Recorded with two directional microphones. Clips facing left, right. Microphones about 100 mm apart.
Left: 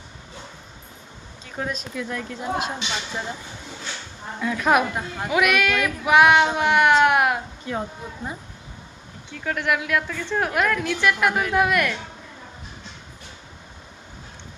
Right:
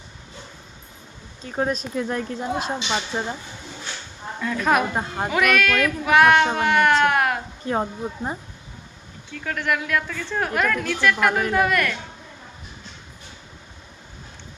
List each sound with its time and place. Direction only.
1.5 s speech: 40° right (ahead or behind)
4.4 s speech: 10° left (ahead or behind)
4.9 s speech: 35° right (ahead or behind)
5.3 s speech: 10° left (ahead or behind)
7.7 s speech: 40° right (ahead or behind)
9.3 s speech: 5° left (ahead or behind)